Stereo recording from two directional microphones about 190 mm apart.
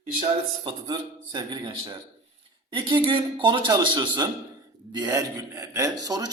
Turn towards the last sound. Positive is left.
turn(degrees=-20)  # may be behind; listen again after turning